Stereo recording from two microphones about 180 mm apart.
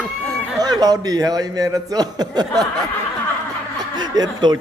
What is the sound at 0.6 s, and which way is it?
A man's voice, 20° right (ahead or behind).